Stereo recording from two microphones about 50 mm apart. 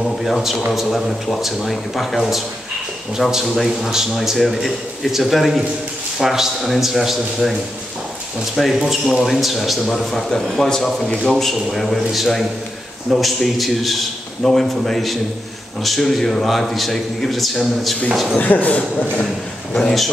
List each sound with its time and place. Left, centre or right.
0.2 s a man's voice: centre
8.8 s a man's voice: centre
18.4 s speech: left
19.7 s a man's voice: centre